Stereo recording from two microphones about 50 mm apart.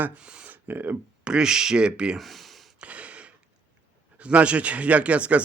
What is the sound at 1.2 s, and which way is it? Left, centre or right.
Speech, centre.